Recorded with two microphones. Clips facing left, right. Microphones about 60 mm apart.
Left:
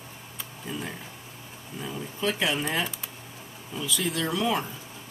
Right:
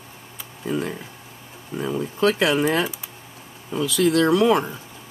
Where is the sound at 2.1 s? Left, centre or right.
Right.